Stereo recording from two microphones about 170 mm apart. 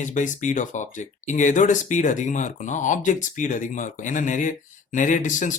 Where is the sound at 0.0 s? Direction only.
45° left (ahead or behind).